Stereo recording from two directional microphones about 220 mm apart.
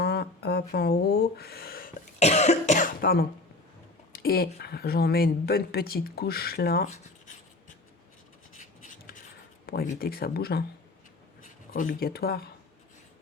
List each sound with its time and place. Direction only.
0.0 s speech: 45° left (ahead or behind)
8.5 s writing: 35° left (ahead or behind)
9.6 s speech: 40° left (ahead or behind)